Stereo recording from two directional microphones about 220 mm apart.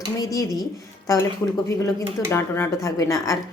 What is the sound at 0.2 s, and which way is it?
Speech, 15° left (ahead or behind).